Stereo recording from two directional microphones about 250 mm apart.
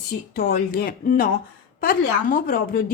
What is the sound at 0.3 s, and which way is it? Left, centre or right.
A woman's voice, left.